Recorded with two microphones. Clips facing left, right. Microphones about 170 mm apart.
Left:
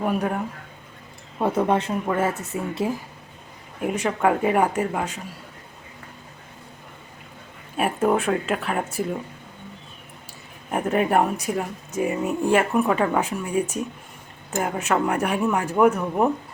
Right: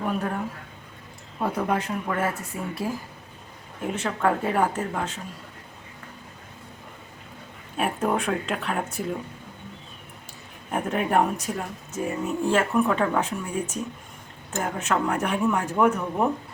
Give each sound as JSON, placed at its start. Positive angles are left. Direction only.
{"t": 0.0, "sound": "speech", "side_deg": 10}
{"t": 1.4, "sound": "speech", "side_deg": 25}
{"t": 3.8, "sound": "speech", "side_deg": 10}
{"t": 7.8, "sound": "speech", "side_deg": 5}
{"t": 10.7, "sound": "speech", "side_deg": 5}